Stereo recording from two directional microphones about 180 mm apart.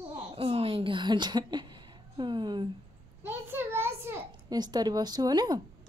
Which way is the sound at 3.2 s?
10° right (ahead or behind).